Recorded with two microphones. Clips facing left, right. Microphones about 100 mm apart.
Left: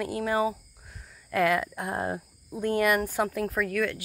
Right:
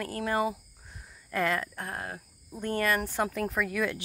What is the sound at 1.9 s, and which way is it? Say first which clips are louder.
Speech: left 11 dB; 25° left (ahead or behind).